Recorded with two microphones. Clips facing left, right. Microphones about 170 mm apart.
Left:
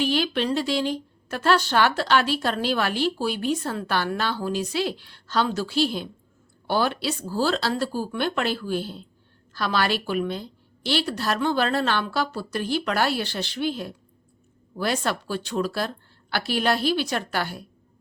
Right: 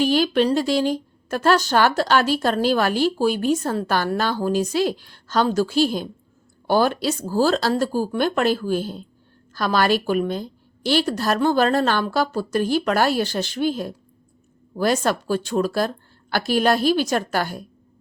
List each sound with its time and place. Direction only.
0.0 s a woman's voice: 45° right (ahead or behind)